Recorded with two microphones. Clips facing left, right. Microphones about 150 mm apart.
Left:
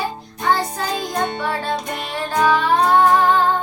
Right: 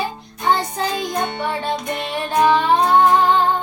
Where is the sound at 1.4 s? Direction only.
20° right (ahead or behind).